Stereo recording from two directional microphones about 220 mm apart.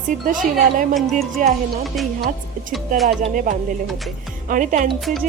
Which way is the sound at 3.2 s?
35° right (ahead or behind).